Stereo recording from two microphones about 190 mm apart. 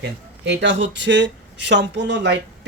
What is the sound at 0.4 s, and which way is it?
A man's voice, 65° right (ahead or behind).